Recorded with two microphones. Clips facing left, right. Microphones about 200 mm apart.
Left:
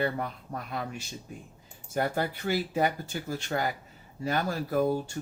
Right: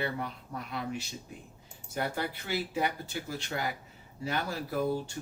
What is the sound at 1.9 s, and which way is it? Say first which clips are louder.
Speech: left 5 dB; 45° left (ahead or behind).